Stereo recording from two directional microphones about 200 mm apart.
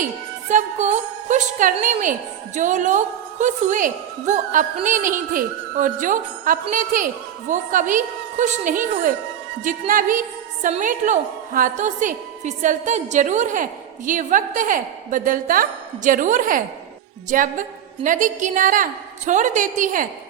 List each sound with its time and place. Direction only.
0.4 s a woman's voice: 35° right (ahead or behind)